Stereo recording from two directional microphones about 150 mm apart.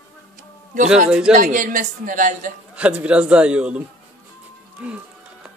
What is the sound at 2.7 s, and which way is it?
Speech, 10° right (ahead or behind).